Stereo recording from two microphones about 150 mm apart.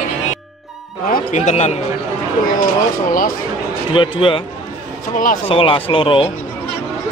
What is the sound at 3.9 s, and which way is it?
Speech, 35° left (ahead or behind).